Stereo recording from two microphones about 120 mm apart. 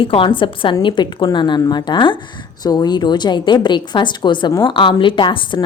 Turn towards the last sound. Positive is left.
turn(degrees=40)  # may be behind; listen again after turning